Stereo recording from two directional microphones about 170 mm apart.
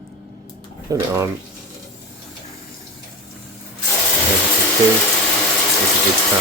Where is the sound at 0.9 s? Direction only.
20° right (ahead or behind).